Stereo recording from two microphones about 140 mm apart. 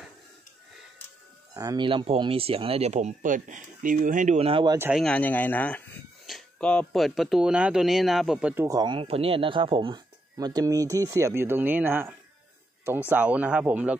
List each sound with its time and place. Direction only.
1.5 s speech: 25° right (ahead or behind); by 4.4 s 65° right (ahead or behind)
4.4 s speech: 40° right (ahead or behind)
4.6 s speech: 15° right (ahead or behind)
4.9 s speech: 5° left (ahead or behind)
8.6 s speech: 30° right (ahead or behind); by 13.9 s 10° right (ahead or behind)